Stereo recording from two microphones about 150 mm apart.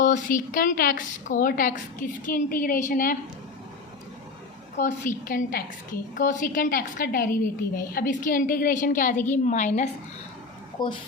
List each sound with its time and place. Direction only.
0.0 s a woman's voice: 60° left (ahead or behind)
4.8 s a woman's voice: 60° left (ahead or behind)
10.8 s a woman's voice: 30° left (ahead or behind)